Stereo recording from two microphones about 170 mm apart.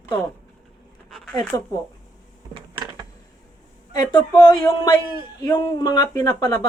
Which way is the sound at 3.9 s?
25° left (ahead or behind).